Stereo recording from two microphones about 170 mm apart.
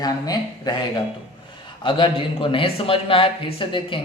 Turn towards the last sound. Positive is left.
turn(degrees=30)  # may be behind; listen again after turning